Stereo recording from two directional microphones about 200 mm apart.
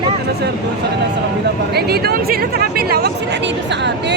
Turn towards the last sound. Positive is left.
turn(degrees=-60)  # may be behind; listen again after turning